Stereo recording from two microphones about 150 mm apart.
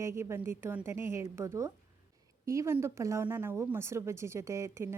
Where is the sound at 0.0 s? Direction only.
20° right (ahead or behind).